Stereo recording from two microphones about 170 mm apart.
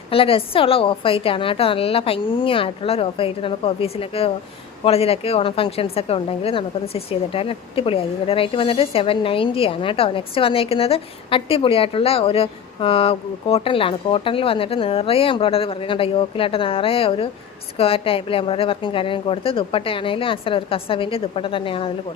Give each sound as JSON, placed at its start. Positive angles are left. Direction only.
{"t": 0.1, "sound": "a woman's voice", "side_deg": 35}